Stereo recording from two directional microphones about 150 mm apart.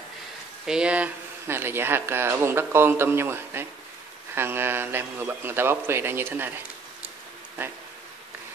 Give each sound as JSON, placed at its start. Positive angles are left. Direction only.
{"t": 0.7, "sound": "speech", "side_deg": -5}